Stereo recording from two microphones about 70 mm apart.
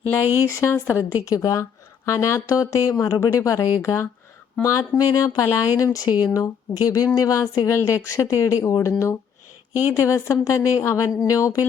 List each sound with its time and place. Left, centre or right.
0.4 s speech: left
1.2 s speech: left